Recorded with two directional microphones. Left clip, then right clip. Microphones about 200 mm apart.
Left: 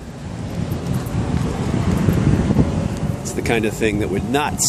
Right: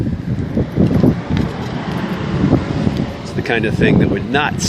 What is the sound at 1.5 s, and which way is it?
Vehicle, 30° right (ahead or behind).